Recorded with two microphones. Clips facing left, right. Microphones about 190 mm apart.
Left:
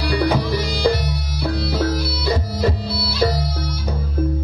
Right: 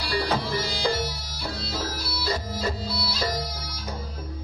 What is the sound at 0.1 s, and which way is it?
Music, 60° left (ahead or behind).